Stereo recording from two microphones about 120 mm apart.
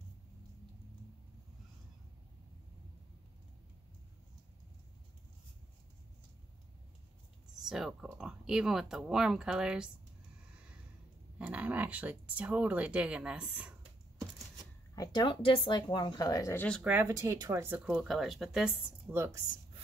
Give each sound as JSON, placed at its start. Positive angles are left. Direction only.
{"t": 7.6, "sound": "speech", "side_deg": -5}
{"t": 11.3, "sound": "speech", "side_deg": -10}
{"t": 15.0, "sound": "speech", "side_deg": 40}
{"t": 16.5, "sound": "speech", "side_deg": 10}
{"t": 16.8, "sound": "speech", "side_deg": -15}
{"t": 17.1, "sound": "speech", "side_deg": -30}
{"t": 17.9, "sound": "speech", "side_deg": 0}